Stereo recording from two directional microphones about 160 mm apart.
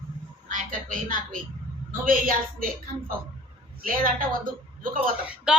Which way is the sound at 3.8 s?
60° right (ahead or behind).